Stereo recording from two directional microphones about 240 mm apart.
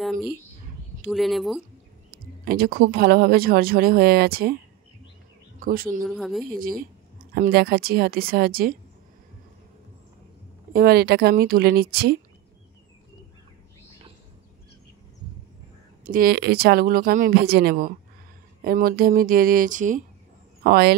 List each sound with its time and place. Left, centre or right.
0.0 s speech: centre
2.0 s speech: right
5.6 s speech: right
6.0 s speech: centre
6.4 s speech: right
10.7 s speech: right
16.1 s speech: right